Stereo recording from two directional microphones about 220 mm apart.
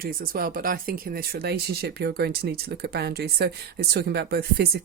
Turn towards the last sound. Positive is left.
turn(degrees=-50)  # may be behind; listen again after turning